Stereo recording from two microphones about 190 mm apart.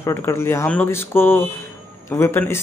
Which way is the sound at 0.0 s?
15° left (ahead or behind).